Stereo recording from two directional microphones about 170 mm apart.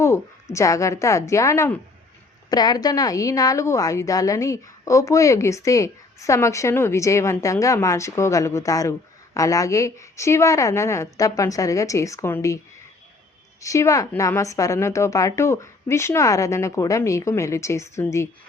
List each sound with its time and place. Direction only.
0.0 s a woman's voice: 15° left (ahead or behind)
13.6 s a woman's voice: 20° left (ahead or behind)